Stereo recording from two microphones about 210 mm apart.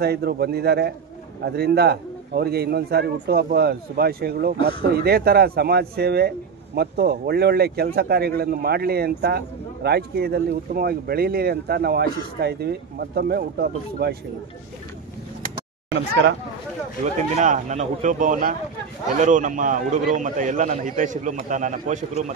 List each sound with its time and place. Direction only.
0.0 s a man's voice: 50° right (ahead or behind)
15.9 s a man's voice: 55° right (ahead or behind)
17.0 s a man's voice: 35° right (ahead or behind)